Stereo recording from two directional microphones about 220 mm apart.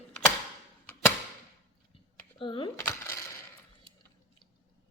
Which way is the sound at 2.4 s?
20° left (ahead or behind).